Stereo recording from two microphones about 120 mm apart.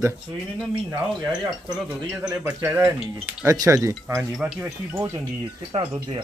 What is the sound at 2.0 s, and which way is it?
Speech, 25° right (ahead or behind).